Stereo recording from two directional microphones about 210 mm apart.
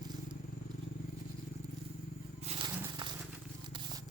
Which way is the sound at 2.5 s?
30° right (ahead or behind).